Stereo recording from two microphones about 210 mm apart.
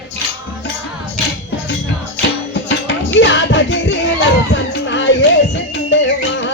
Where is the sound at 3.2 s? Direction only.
60° left (ahead or behind).